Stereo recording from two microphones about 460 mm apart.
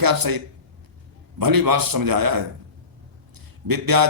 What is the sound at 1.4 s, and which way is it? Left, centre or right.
Speech, right.